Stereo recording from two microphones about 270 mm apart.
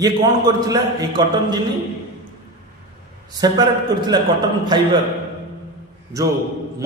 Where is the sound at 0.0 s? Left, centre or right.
Centre.